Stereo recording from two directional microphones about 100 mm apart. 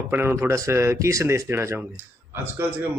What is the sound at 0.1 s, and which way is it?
Speech, 20° right (ahead or behind).